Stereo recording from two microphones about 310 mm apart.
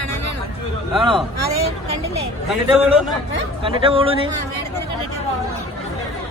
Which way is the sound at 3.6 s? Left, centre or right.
Centre.